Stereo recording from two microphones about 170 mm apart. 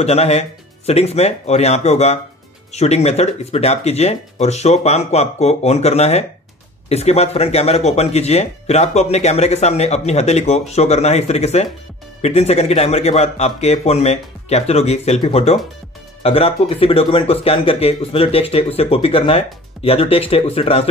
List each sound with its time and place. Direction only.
0.0 s speech: 40° left (ahead or behind)